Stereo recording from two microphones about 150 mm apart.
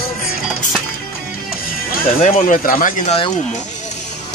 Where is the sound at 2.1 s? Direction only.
55° left (ahead or behind).